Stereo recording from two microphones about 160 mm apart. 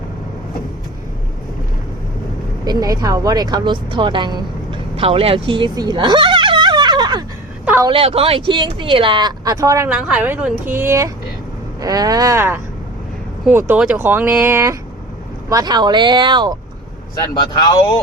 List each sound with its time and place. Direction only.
2.6 s speech: 25° right (ahead or behind)
4.9 s a sound: 35° right (ahead or behind)
7.6 s a sound: 10° right (ahead or behind)
7.9 s speech: 35° right (ahead or behind); by 9.9 s 20° right (ahead or behind)
9.9 s speech: 5° right (ahead or behind)
13.7 s speech: 10° right (ahead or behind); by 16.6 s 30° right (ahead or behind)
17.3 s speech: 25° left (ahead or behind)